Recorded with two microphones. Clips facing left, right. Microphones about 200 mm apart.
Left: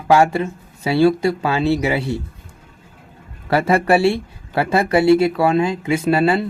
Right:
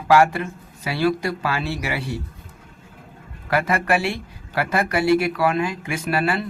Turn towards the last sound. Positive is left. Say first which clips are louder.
# left 7 dB
turn(degrees=25)  # may be behind; listen again after turning